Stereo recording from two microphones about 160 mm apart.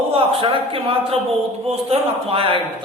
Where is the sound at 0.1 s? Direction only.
35° right (ahead or behind).